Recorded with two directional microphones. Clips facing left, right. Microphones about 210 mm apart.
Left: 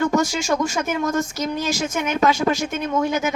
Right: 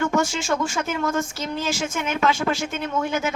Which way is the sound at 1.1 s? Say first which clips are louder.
Left 3 dB; 40° left (ahead or behind).